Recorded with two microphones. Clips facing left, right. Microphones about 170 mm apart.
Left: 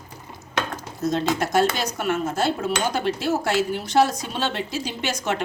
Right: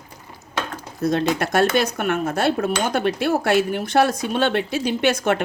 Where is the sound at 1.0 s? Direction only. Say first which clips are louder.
Right 2 dB; 60° right (ahead or behind).